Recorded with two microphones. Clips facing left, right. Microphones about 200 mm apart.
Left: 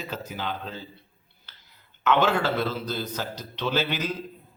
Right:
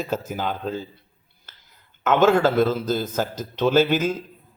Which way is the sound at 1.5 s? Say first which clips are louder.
Right 3 dB; 45° right (ahead or behind).